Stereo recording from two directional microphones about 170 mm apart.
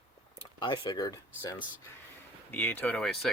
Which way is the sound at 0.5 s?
25° left (ahead or behind).